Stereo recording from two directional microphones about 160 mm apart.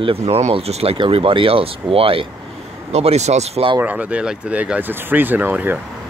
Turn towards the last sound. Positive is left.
turn(degrees=-10)  # may be behind; listen again after turning